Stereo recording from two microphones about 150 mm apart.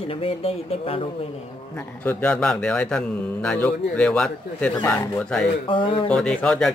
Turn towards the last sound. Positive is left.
turn(degrees=5)  # may be behind; listen again after turning